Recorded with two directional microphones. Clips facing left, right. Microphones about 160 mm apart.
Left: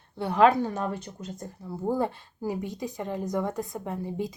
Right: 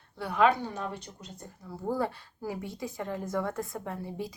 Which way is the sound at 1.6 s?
25° left (ahead or behind).